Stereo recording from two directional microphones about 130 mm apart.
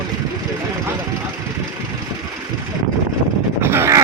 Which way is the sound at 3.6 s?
20° right (ahead or behind).